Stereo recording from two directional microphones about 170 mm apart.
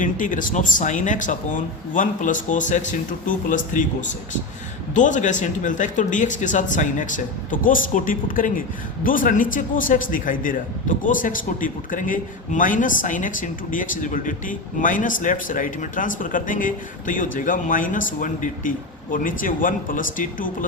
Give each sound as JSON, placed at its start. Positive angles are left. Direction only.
{"t": 0.0, "sound": "a man's voice", "side_deg": 50}
{"t": 4.9, "sound": "a man's voice", "side_deg": 45}